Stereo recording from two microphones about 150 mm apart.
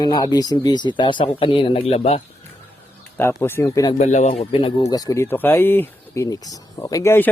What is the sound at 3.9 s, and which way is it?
Speech, 50° left (ahead or behind).